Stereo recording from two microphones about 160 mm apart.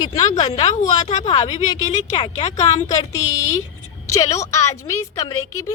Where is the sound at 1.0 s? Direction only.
45° left (ahead or behind).